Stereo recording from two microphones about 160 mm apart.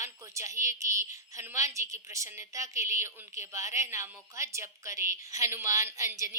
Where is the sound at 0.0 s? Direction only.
20° right (ahead or behind).